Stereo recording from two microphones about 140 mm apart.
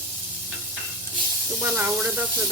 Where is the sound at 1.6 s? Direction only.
15° right (ahead or behind).